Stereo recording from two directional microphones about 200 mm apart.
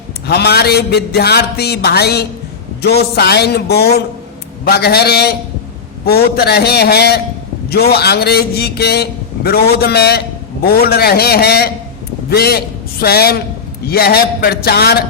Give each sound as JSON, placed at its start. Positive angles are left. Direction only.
{"t": 0.3, "sound": "a man's voice", "side_deg": 55}